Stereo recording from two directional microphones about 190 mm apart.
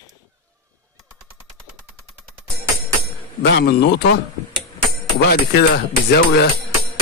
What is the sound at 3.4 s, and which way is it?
Speech, 60° left (ahead or behind).